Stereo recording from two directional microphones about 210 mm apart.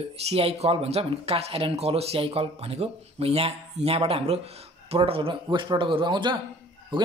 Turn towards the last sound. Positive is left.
turn(degrees=-20)  # may be behind; listen again after turning